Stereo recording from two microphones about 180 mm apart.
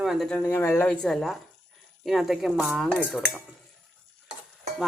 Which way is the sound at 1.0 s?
Centre (ahead or behind).